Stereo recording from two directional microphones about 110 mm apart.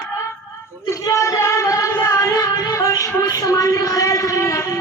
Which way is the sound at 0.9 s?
30° left (ahead or behind).